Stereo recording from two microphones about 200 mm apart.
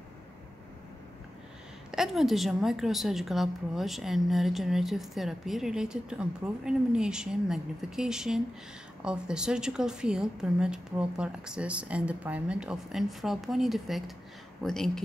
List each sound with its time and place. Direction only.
1.9 s a woman's voice: centre (ahead or behind)